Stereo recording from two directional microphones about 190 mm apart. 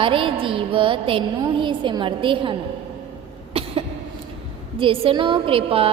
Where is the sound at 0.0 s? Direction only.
25° right (ahead or behind).